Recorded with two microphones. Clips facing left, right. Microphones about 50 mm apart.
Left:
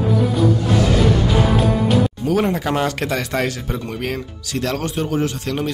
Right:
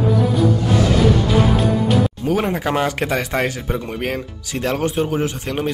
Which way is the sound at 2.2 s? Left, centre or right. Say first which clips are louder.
Left 1 dB; centre.